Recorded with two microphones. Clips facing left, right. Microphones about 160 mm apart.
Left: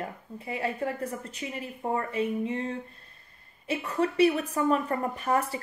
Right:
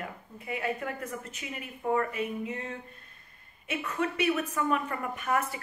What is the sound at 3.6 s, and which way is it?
A woman's voice, 35° left (ahead or behind).